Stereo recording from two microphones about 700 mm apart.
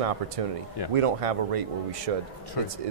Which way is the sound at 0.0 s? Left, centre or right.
Right.